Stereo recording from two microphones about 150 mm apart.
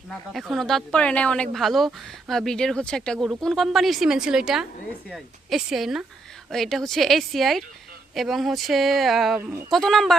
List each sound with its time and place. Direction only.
0.1 s speech: centre (ahead or behind)
9.4 s speech: 15° right (ahead or behind)
9.6 s speech: centre (ahead or behind)